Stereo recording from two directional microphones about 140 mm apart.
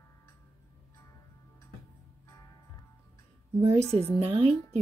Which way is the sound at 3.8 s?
5° left (ahead or behind).